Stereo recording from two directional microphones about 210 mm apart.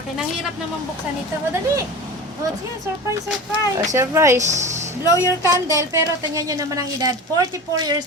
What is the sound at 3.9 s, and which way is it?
Speech, 15° right (ahead or behind).